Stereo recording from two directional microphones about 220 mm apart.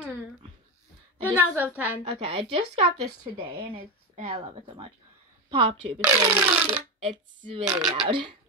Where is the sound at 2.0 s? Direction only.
25° right (ahead or behind).